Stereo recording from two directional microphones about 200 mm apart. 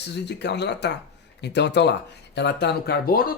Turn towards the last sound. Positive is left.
turn(degrees=45)  # may be behind; listen again after turning